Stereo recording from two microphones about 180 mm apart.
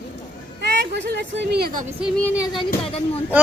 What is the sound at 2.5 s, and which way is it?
Speech, 30° left (ahead or behind).